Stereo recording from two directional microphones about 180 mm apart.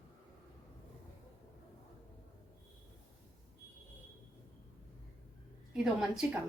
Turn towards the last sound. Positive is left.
turn(degrees=0)  # may be behind; listen again after turning